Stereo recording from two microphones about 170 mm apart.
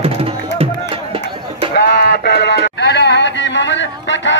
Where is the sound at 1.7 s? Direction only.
70° left (ahead or behind).